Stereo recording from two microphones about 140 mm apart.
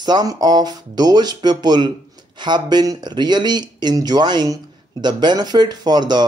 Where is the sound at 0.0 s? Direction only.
30° right (ahead or behind).